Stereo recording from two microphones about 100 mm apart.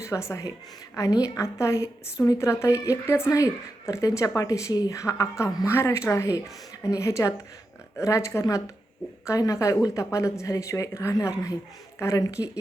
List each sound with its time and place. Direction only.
0.0 s a woman's voice: 30° left (ahead or behind)